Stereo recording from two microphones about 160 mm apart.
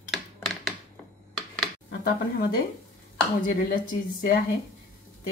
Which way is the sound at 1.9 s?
70° left (ahead or behind).